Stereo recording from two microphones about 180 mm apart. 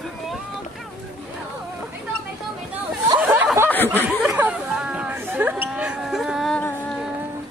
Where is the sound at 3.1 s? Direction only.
10° right (ahead or behind).